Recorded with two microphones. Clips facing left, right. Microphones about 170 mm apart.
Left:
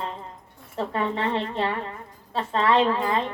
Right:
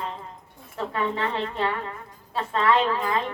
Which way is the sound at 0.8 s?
30° left (ahead or behind).